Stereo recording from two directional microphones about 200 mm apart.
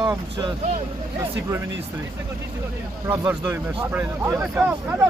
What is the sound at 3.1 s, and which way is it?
Speech, 10° right (ahead or behind).